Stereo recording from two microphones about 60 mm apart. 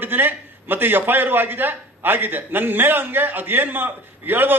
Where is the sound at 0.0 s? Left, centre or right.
Right.